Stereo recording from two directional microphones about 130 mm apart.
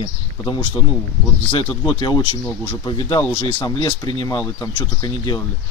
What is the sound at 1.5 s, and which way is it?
Speech, 40° left (ahead or behind).